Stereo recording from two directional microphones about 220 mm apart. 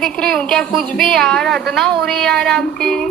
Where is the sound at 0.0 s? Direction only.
5° left (ahead or behind).